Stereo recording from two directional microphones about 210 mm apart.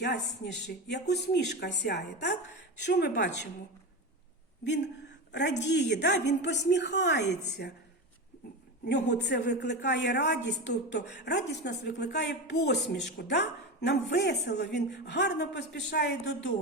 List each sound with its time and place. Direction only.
0.0 s speech: 50° left (ahead or behind)
5.3 s speech: 55° left (ahead or behind)
8.9 s speech: 55° left (ahead or behind)